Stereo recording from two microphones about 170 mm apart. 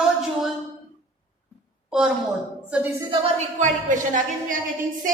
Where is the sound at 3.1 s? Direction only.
45° right (ahead or behind).